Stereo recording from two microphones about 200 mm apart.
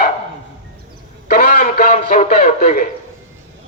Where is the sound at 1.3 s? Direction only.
40° left (ahead or behind).